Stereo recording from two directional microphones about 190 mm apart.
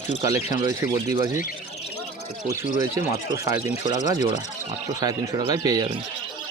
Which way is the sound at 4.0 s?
40° left (ahead or behind).